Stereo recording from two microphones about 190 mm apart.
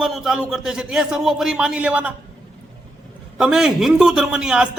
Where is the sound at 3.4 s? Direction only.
5° right (ahead or behind).